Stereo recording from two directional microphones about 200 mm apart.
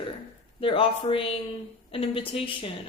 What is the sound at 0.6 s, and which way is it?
Speech, 25° left (ahead or behind).